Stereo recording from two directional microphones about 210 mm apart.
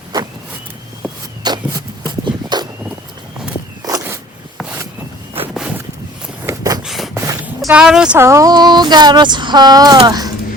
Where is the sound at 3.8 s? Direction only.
15° right (ahead or behind).